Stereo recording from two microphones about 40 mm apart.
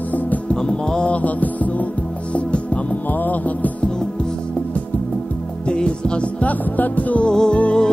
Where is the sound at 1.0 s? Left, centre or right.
Left.